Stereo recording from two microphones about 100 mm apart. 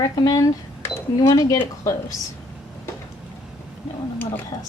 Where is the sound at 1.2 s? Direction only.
35° left (ahead or behind).